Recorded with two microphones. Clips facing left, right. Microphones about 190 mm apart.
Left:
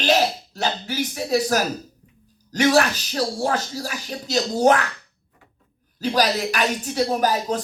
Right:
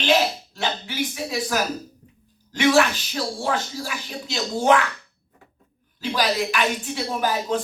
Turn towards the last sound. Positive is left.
turn(degrees=40)  # may be behind; listen again after turning